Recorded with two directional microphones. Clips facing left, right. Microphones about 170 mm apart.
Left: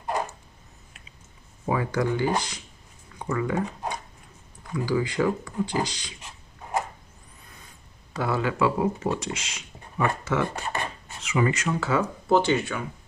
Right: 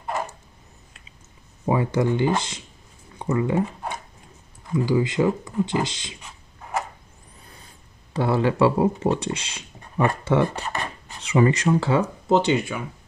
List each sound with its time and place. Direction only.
1.7 s speech: 25° right (ahead or behind)
4.7 s speech: 20° right (ahead or behind)
8.1 s speech: 30° right (ahead or behind); by 12.8 s 15° right (ahead or behind)